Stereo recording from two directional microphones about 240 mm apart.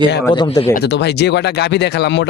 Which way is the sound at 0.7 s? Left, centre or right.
Left.